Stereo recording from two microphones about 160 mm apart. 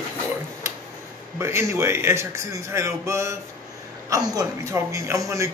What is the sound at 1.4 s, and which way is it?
Speech, 15° right (ahead or behind).